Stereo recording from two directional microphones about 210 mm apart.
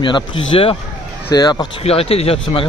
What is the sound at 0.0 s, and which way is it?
Speech, 25° left (ahead or behind).